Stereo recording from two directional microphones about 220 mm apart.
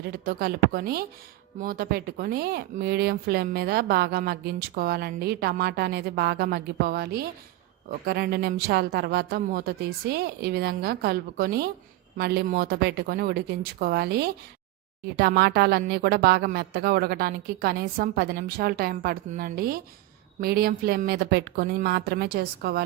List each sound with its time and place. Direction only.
0.3 s speech: 45° right (ahead or behind)